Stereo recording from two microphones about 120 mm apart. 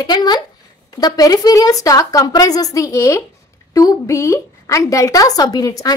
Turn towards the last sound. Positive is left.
turn(degrees=30)  # may be behind; listen again after turning